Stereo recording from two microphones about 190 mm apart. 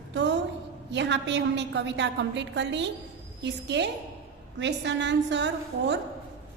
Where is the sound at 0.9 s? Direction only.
70° right (ahead or behind).